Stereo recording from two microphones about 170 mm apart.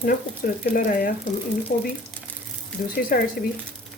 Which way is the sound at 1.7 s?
55° left (ahead or behind).